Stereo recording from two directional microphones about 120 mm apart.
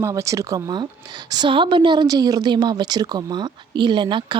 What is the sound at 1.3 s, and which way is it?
Speech, 40° right (ahead or behind).